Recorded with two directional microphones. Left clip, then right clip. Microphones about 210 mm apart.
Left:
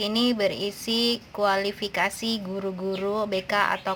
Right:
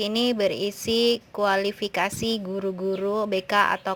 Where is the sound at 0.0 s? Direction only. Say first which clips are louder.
Right 1 dB; 30° right (ahead or behind).